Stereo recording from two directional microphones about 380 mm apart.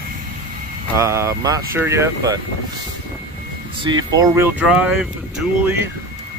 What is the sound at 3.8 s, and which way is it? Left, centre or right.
Speech, centre.